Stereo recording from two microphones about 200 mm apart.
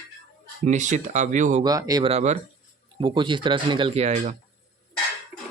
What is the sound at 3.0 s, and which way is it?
Speech, 25° right (ahead or behind).